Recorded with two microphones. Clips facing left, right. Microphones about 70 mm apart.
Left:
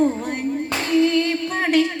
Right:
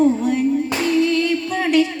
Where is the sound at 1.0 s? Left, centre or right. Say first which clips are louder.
Left 2 dB; left.